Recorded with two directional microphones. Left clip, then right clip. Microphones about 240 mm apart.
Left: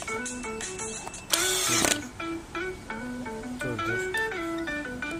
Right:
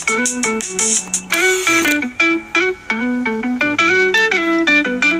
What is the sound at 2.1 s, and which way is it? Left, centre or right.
Music, right.